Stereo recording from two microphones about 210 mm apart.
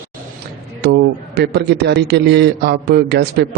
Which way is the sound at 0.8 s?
50° right (ahead or behind).